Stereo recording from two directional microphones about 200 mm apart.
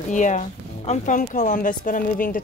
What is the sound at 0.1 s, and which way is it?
Speech, 40° left (ahead or behind).